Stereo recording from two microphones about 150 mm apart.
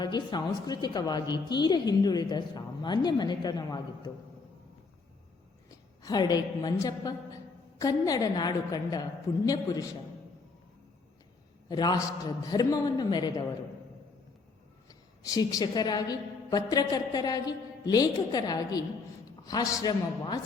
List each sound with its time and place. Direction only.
0.0 s a woman's voice: 30° left (ahead or behind)
6.0 s a woman's voice: 25° left (ahead or behind)
11.7 s a woman's voice: 25° left (ahead or behind)
14.8 s a woman's voice: 25° left (ahead or behind)